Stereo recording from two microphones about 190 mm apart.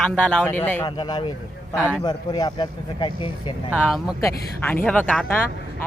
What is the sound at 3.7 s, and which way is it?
Speech, 10° left (ahead or behind).